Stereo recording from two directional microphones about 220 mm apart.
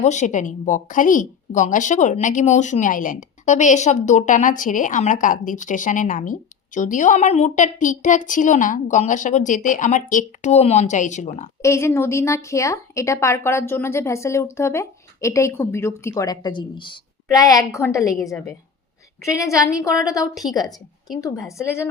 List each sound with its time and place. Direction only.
0.0 s a woman's voice: 35° left (ahead or behind)
11.6 s a woman's voice: 10° left (ahead or behind)
20.3 s a woman's voice: centre (ahead or behind)
21.1 s a woman's voice: 15° left (ahead or behind)